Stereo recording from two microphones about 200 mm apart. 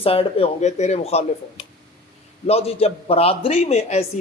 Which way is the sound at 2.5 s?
30° left (ahead or behind).